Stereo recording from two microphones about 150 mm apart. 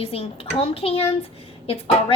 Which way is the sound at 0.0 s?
40° left (ahead or behind).